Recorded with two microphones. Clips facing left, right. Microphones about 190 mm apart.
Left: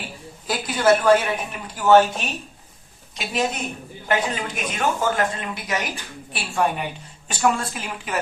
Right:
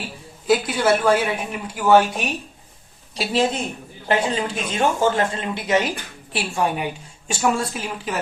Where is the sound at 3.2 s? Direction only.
30° right (ahead or behind).